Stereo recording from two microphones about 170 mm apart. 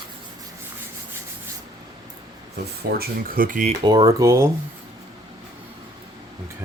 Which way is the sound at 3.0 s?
55° right (ahead or behind).